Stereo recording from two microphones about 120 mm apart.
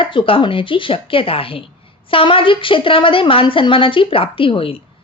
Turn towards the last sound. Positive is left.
turn(degrees=50)  # may be behind; listen again after turning